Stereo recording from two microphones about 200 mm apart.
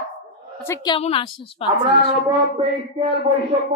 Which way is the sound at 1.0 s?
30° left (ahead or behind).